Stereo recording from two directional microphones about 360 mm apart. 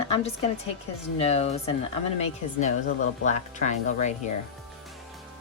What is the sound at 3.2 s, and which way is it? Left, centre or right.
Speech, centre.